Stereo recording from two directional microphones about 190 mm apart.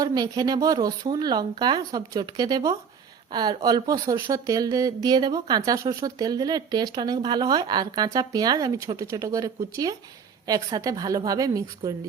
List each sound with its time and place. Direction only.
0.0 s speech: 20° right (ahead or behind)